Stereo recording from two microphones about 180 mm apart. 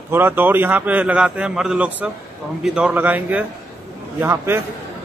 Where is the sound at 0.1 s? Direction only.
10° right (ahead or behind).